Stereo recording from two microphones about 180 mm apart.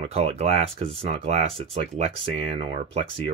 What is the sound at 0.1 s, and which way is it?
Speech, 35° right (ahead or behind).